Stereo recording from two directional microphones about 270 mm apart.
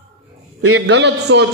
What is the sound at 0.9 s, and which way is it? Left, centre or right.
Speech, right.